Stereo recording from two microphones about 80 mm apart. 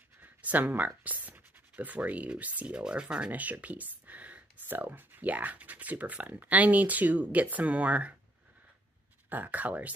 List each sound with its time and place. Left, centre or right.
0.2 s speech: right
9.3 s speech: right